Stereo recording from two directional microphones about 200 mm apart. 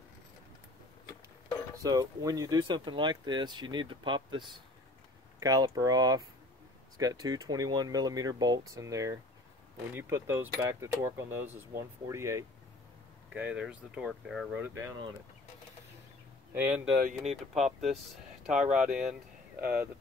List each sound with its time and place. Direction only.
1.8 s speech: 20° right (ahead or behind)
5.4 s speech: 15° right (ahead or behind)
16.5 s speech: 5° right (ahead or behind)
17.3 s speech: 35° right (ahead or behind)
18.5 s speech: 5° right (ahead or behind)